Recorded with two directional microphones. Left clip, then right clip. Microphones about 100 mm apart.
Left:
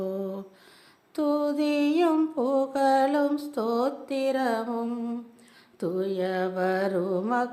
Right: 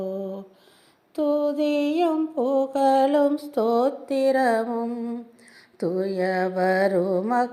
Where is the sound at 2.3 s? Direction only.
10° right (ahead or behind); by 4.8 s 25° right (ahead or behind).